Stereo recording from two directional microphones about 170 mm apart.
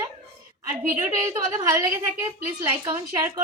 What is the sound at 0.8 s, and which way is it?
Speech, 55° right (ahead or behind).